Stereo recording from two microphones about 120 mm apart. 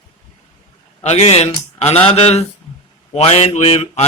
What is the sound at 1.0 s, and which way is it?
Speech, 60° left (ahead or behind).